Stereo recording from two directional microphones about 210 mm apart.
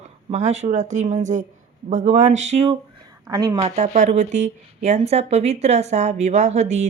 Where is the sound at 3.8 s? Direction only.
35° right (ahead or behind).